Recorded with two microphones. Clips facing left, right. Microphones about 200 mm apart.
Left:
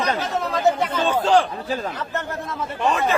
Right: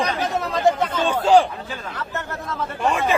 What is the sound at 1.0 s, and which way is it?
Speech, 10° right (ahead or behind).